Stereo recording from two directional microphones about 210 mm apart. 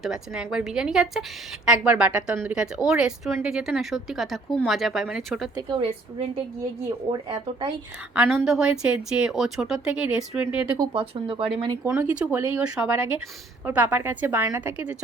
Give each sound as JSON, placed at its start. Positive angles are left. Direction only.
{"t": 0.0, "sound": "speech", "side_deg": 0}
{"t": 5.5, "sound": "a woman's voice", "side_deg": -20}
{"t": 8.1, "sound": "speech", "side_deg": -5}
{"t": 10.8, "sound": "a woman's voice", "side_deg": -25}
{"t": 11.8, "sound": "speech", "side_deg": -10}